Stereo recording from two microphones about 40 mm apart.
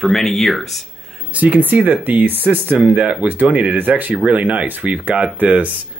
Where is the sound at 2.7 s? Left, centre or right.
Right.